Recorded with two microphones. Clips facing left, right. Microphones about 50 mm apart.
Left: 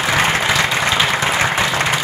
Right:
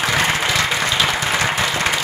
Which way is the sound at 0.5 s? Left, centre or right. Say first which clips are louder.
Left 3 dB; left.